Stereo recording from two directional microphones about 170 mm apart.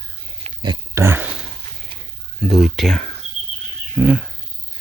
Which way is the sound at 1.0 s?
10° right (ahead or behind).